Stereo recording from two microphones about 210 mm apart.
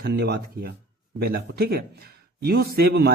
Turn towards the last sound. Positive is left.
turn(degrees=-50)  # may be behind; listen again after turning